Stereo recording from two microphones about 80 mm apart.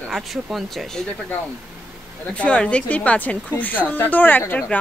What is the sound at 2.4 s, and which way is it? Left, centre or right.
A woman's voice, centre.